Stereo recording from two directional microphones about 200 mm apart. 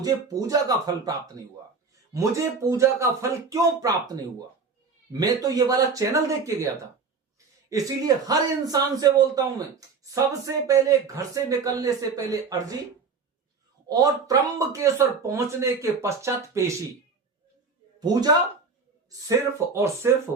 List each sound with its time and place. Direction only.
0.0 s a man's voice: 15° right (ahead or behind)
2.1 s a man's voice: 15° right (ahead or behind)
7.7 s a man's voice: 20° right (ahead or behind)
13.8 s a man's voice: 15° right (ahead or behind)
18.0 s speech: 20° right (ahead or behind)
19.3 s a man's voice: 15° right (ahead or behind)